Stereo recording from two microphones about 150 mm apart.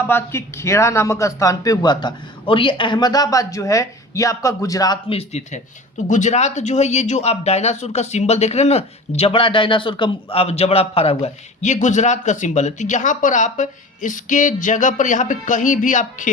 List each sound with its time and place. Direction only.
0.0 s speech: 15° left (ahead or behind)
5.0 s speech: 45° left (ahead or behind)
6.1 s speech: 55° left (ahead or behind)